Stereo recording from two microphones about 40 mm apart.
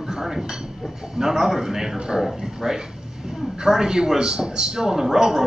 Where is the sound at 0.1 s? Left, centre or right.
Centre.